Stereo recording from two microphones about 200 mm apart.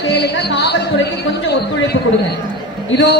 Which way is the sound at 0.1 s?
55° left (ahead or behind).